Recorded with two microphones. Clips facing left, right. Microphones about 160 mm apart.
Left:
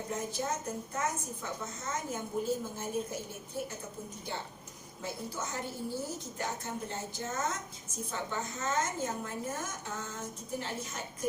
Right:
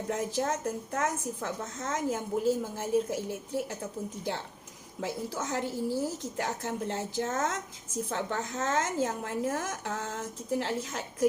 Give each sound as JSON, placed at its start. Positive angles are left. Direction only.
{"t": 0.1, "sound": "a woman's voice", "side_deg": -90}
{"t": 4.9, "sound": "a woman's voice", "side_deg": -90}